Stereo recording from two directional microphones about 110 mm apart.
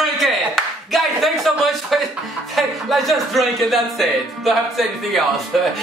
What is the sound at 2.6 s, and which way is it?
Speech, centre (ahead or behind).